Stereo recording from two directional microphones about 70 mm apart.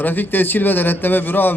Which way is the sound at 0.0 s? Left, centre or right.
Left.